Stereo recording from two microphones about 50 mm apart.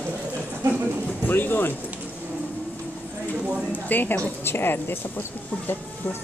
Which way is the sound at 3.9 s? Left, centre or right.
Left.